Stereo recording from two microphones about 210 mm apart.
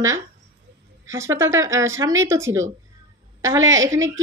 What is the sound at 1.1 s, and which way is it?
Speech, 15° right (ahead or behind).